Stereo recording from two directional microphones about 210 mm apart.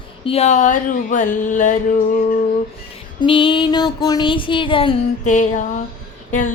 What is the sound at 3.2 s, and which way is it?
Female singing, 25° left (ahead or behind).